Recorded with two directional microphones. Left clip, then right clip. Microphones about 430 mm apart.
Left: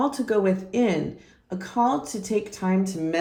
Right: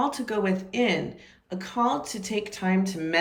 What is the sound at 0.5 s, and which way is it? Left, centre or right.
Speech, centre.